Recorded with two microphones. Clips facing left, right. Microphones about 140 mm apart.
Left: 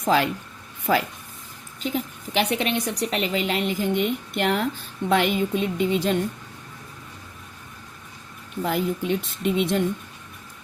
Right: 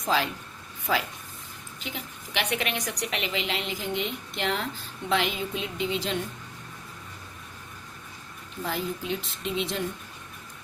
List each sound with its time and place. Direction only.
0.0 s a woman's voice: 55° left (ahead or behind)
1.8 s a woman's voice: 40° left (ahead or behind)
8.6 s a woman's voice: 55° left (ahead or behind)